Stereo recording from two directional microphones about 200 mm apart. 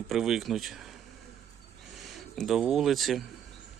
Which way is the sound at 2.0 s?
Centre (ahead or behind).